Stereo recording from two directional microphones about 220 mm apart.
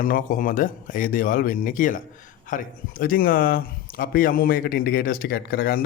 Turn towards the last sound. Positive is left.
turn(degrees=45)  # may be behind; listen again after turning